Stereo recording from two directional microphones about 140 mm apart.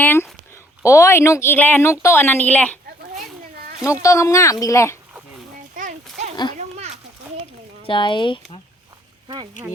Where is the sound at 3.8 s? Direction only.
20° left (ahead or behind).